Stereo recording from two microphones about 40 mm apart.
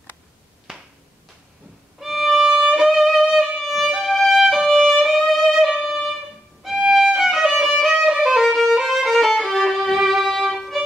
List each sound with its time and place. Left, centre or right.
0.7 s a sound: centre
2.0 s violin: centre
6.6 s violin: centre
7.6 s music: centre
8.0 s violin: centre
9.8 s music: centre